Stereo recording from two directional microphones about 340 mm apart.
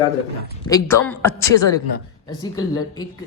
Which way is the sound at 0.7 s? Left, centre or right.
Centre.